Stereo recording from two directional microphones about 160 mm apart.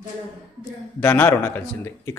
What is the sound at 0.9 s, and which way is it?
A man's voice, 10° left (ahead or behind).